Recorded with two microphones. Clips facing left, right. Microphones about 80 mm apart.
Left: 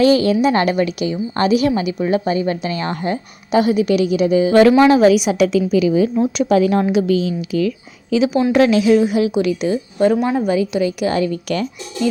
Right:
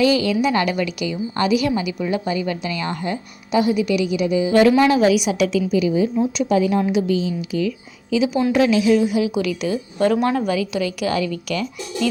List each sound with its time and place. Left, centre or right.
0.0 s a woman's voice: left
4.7 s a woman's voice: left
5.7 s a woman's voice: left
8.1 s a woman's voice: left
9.3 s a woman's voice: left
10.2 s a woman's voice: centre
10.5 s a woman's voice: left